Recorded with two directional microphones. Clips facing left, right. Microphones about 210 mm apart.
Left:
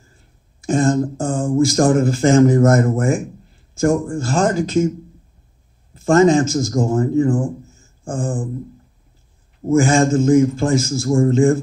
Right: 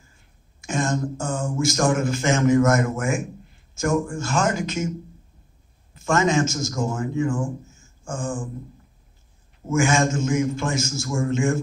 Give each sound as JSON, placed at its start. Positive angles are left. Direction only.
{"t": 0.7, "sound": "speech", "side_deg": 35}
{"t": 6.0, "sound": "a man's voice", "side_deg": 35}
{"t": 9.7, "sound": "speech", "side_deg": 35}